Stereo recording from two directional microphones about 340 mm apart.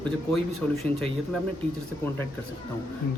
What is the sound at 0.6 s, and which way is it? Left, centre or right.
Speech, centre.